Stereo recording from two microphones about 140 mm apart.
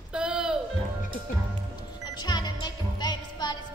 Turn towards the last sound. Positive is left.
turn(degrees=30)  # may be behind; listen again after turning